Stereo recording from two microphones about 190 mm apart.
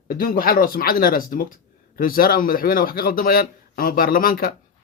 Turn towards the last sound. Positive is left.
turn(degrees=50)  # may be behind; listen again after turning